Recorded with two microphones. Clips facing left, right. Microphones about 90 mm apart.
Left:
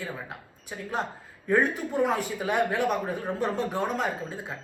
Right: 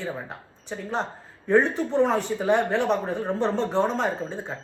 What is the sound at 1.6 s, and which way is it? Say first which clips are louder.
Speech: right 4 dB; 10° left (ahead or behind).